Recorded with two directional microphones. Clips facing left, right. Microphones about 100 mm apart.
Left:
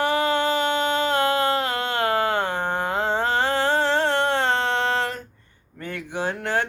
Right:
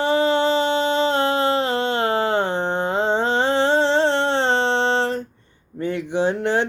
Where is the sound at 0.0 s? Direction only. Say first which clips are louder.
Right 3 dB; 25° right (ahead or behind).